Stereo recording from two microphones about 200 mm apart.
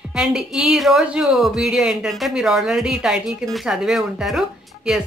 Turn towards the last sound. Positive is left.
turn(degrees=0)  # may be behind; listen again after turning